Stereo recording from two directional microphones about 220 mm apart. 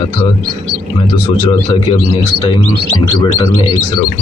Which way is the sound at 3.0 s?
20° left (ahead or behind).